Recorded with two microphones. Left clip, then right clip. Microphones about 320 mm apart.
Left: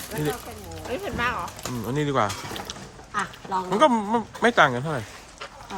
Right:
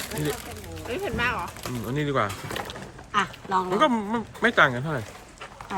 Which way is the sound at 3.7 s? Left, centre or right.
Centre.